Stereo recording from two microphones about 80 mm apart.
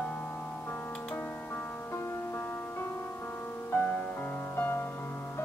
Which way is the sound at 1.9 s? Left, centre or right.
Left.